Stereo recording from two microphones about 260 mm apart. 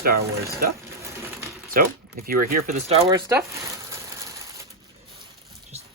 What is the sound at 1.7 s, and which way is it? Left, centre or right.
Speech, right.